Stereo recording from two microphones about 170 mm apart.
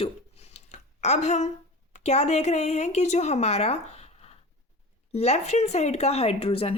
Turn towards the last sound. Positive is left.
turn(degrees=35)  # may be behind; listen again after turning